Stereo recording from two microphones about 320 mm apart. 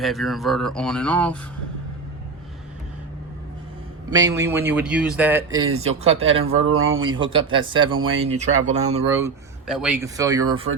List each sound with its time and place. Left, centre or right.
0.0 s speech: centre
4.1 s speech: centre
5.6 s speech: right
6.2 s speech: centre
6.7 s speech: right
7.0 s speech: centre